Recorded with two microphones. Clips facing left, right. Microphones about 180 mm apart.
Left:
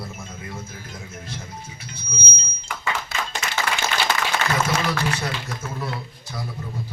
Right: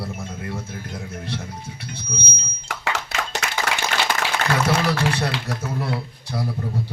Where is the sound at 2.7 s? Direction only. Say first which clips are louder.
Right 1 dB; 75° right (ahead or behind).